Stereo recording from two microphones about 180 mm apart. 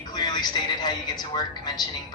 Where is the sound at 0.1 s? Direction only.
20° left (ahead or behind).